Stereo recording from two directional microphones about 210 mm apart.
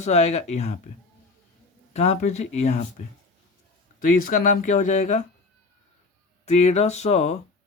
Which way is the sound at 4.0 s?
40° left (ahead or behind).